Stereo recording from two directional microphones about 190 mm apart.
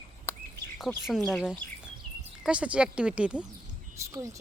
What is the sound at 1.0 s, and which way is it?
A woman's voice, centre (ahead or behind).